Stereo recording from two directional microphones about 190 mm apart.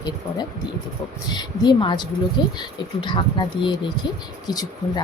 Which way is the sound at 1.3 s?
20° left (ahead or behind).